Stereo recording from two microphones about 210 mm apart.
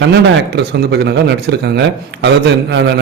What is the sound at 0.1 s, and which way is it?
A man's voice, 50° right (ahead or behind).